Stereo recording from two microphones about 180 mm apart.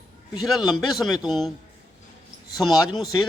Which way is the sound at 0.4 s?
Centre (ahead or behind).